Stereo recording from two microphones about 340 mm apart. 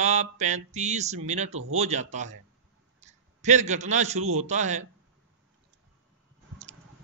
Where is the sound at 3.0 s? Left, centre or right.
Right.